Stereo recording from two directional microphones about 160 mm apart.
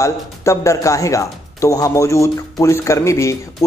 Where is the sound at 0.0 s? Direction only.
20° left (ahead or behind).